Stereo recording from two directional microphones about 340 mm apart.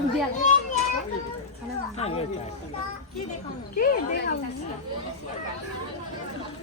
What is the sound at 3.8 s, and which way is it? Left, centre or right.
Speech, left.